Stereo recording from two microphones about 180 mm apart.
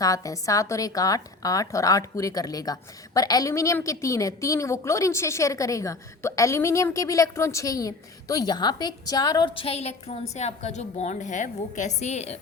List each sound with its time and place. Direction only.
0.0 s a woman's voice: 20° left (ahead or behind); by 12.4 s 40° left (ahead or behind)